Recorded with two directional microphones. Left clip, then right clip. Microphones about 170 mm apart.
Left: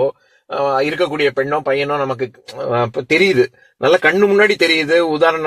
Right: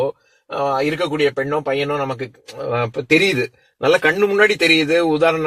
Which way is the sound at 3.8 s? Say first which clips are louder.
Left 3 dB; 40° left (ahead or behind).